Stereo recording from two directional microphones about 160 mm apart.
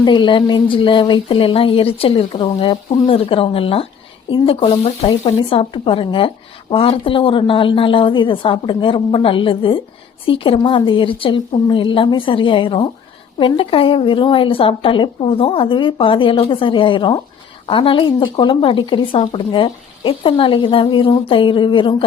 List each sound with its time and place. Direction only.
0.0 s speech: 30° left (ahead or behind)